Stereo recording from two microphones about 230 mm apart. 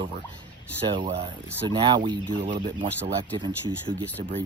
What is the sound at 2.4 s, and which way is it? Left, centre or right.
Speech, right.